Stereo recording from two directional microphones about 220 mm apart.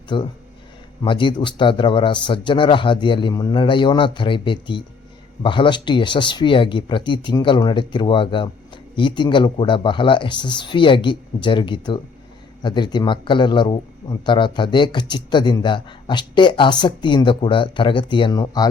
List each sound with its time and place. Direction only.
0.1 s speech: 20° left (ahead or behind)